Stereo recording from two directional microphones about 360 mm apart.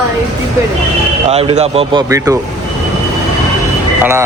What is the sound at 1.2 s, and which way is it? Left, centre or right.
Speech, centre.